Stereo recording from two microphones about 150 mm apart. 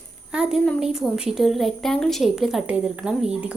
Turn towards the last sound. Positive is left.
turn(degrees=-5)  # may be behind; listen again after turning